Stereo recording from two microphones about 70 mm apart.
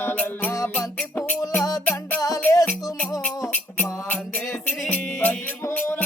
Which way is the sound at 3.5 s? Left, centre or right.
Left.